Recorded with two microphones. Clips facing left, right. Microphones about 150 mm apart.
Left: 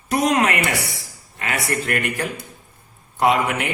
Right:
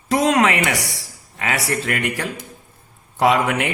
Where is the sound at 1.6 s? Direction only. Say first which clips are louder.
Right 1 dB; 85° right.